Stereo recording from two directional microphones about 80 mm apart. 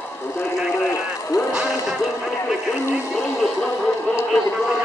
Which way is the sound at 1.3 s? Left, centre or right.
Left.